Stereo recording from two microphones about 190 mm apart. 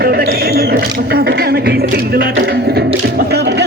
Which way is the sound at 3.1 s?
60° right (ahead or behind).